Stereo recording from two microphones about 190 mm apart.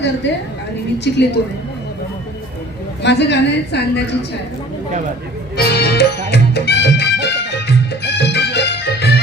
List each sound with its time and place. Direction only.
0.9 s a woman's voice: 65° left (ahead or behind)
3.0 s a woman's voice: 65° left (ahead or behind)
5.5 s music: 60° left (ahead or behind)